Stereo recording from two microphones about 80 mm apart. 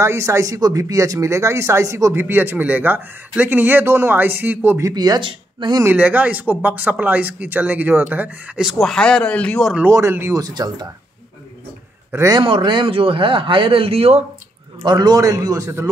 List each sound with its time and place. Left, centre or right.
0.0 s speech: right
2.1 s speech: right
4.9 s speech: right
5.9 s speech: centre
8.5 s speech: centre
9.8 s speech: right
10.4 s speech: right
12.4 s speech: right
14.9 s a man's voice: right